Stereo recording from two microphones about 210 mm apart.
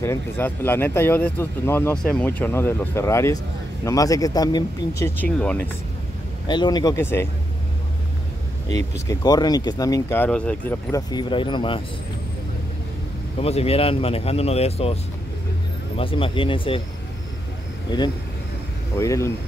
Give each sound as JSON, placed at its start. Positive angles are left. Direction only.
{"t": 0.0, "sound": "speech", "side_deg": 10}
{"t": 6.4, "sound": "speech", "side_deg": 20}
{"t": 9.0, "sound": "speech", "side_deg": 20}
{"t": 13.4, "sound": "speech", "side_deg": 30}
{"t": 16.0, "sound": "speech", "side_deg": 25}
{"t": 18.9, "sound": "speech", "side_deg": 15}